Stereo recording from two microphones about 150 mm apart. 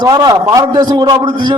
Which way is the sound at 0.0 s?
25° right (ahead or behind).